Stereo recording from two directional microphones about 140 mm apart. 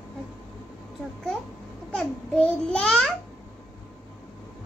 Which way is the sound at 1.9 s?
5° left (ahead or behind).